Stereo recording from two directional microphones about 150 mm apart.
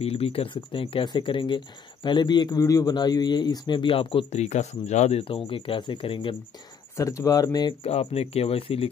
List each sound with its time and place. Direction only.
0.0 s speech: 40° left (ahead or behind)
7.0 s speech: 20° left (ahead or behind)
7.8 s speech: 40° left (ahead or behind)